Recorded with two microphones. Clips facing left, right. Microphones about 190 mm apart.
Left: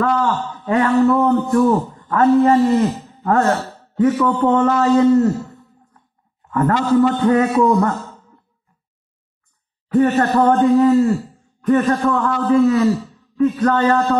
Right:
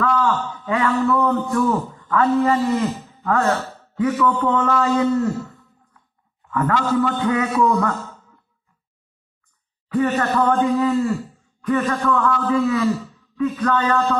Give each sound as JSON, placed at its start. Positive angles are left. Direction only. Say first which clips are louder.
{"t": 0.0, "sound": "a man's voice", "louder": "left 2 dB", "side_deg": 40}
{"t": 9.9, "sound": "a man's voice", "louder": "left 5 dB", "side_deg": 35}